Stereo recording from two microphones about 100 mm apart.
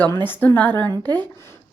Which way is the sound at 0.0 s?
20° left (ahead or behind).